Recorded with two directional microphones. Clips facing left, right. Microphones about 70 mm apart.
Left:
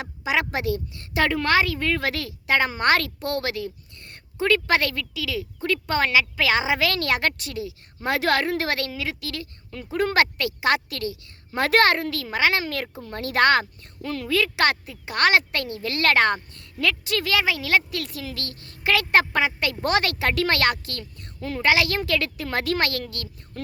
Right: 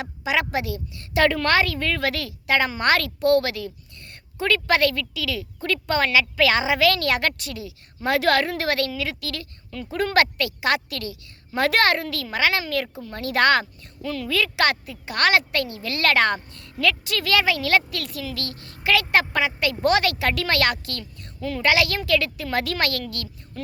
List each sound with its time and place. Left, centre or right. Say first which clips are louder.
0.0 s speech: right 1 dB; left
1.1 s a woman's voice: right 2 dB; centre
14.0 s a woman's voice: left 1 dB; left
17.3 s speech: right 3 dB; centre
18.0 s speech: right 2 dB; left